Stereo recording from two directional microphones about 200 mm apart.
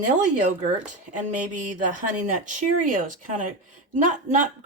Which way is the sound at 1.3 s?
40° right (ahead or behind).